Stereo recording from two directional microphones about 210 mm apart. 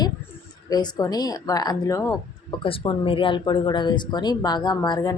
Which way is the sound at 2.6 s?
25° left (ahead or behind).